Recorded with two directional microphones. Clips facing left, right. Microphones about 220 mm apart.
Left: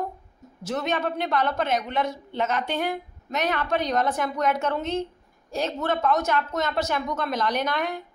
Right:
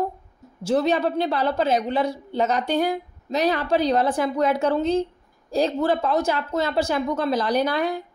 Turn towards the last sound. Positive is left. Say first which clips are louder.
# right 5 dB
turn(degrees=-35)  # may be behind; listen again after turning